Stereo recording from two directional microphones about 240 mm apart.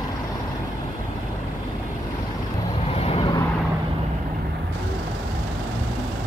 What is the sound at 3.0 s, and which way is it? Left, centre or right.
Vehicle, left.